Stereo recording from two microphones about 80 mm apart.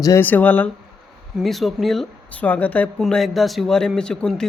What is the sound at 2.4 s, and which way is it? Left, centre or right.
Speech, centre.